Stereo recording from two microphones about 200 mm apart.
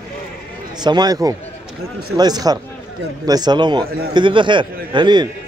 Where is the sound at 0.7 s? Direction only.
20° right (ahead or behind).